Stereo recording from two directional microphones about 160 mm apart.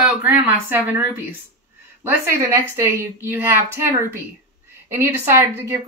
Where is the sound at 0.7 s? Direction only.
15° right (ahead or behind).